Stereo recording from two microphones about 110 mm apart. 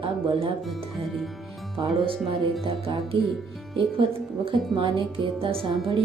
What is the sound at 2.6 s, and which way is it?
Speech, 55° right (ahead or behind).